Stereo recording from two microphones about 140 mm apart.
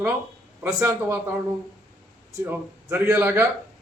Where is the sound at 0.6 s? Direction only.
20° right (ahead or behind).